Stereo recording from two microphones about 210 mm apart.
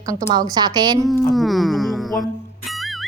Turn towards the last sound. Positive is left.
turn(degrees=0)  # may be behind; listen again after turning